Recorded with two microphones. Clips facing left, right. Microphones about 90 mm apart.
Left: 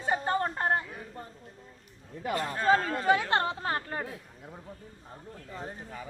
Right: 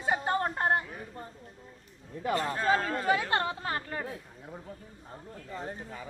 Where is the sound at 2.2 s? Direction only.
35° right (ahead or behind).